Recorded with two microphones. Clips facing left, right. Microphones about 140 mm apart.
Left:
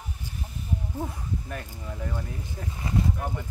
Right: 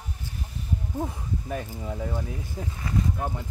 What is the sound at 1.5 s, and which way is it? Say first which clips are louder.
Speech: right 5 dB; 15° right (ahead or behind).